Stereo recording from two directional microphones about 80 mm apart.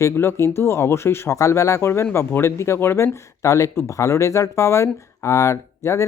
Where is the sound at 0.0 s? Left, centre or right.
Left.